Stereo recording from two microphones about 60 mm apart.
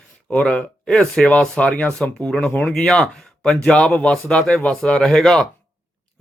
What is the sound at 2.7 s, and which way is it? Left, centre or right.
A man's voice, centre.